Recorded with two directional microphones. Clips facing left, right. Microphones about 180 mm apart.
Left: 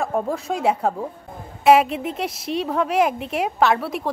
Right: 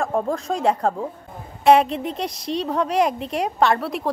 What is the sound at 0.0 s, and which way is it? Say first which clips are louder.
A woman's voice: right 1 dB; 5° left (ahead or behind).